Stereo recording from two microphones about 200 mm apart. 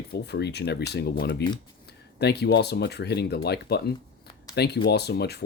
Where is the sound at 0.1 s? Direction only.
55° left (ahead or behind).